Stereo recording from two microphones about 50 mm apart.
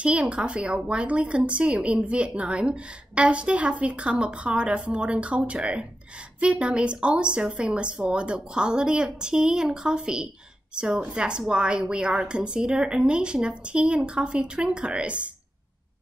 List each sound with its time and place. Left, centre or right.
0.0 s speech: right